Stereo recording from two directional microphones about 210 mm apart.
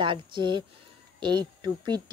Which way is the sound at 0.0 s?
25° right (ahead or behind).